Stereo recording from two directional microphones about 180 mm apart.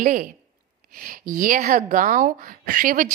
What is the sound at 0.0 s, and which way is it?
A woman's voice, 50° right (ahead or behind).